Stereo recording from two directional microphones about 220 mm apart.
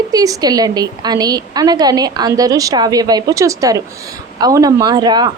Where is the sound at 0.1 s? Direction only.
15° right (ahead or behind).